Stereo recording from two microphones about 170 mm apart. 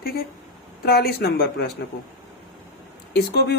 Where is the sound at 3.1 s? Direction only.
75° left (ahead or behind).